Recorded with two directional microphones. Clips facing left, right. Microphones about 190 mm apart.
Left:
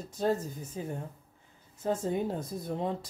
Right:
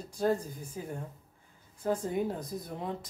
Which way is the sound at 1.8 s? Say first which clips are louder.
Even; 25° left (ahead or behind).